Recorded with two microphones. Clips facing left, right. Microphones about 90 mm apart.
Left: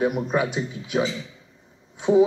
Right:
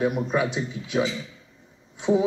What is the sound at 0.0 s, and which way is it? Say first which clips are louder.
Speech: left 1 dB; 10° left (ahead or behind).